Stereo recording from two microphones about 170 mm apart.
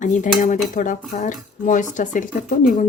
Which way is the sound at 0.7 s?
50° left (ahead or behind).